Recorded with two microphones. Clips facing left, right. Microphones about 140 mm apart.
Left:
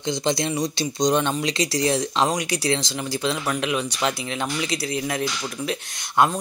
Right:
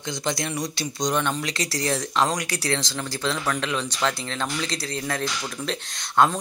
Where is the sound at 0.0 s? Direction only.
20° left (ahead or behind).